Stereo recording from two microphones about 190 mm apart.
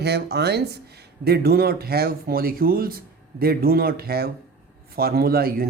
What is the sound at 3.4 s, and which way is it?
Speech, 55° right (ahead or behind).